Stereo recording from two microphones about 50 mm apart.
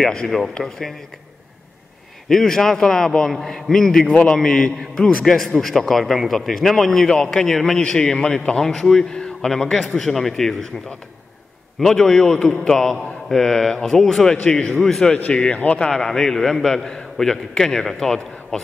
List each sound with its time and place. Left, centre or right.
0.0 s a man's voice: centre
2.2 s a man's voice: centre
9.1 s a man's voice: centre
11.8 s a man's voice: centre
15.3 s speech: left
15.9 s a man's voice: centre